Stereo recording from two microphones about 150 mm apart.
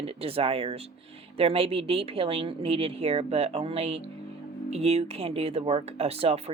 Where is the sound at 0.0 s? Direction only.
40° right (ahead or behind).